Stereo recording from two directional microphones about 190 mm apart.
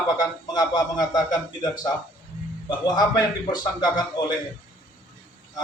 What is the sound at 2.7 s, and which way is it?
A man's voice, 20° left (ahead or behind).